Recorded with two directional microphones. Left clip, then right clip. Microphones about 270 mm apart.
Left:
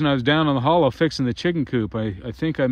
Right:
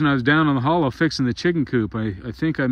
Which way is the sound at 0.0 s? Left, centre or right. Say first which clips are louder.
Right 1 dB; centre.